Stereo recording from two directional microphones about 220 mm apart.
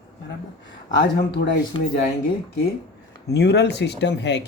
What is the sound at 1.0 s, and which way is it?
Speech, 50° left (ahead or behind).